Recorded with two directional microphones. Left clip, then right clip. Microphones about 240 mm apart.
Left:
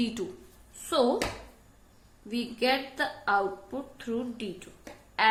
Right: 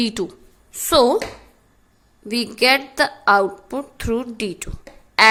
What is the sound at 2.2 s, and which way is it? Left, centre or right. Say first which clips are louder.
A woman's voice: right 11 dB; right.